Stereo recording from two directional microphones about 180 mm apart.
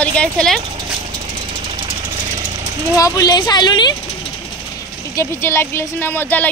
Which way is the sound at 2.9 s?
20° left (ahead or behind).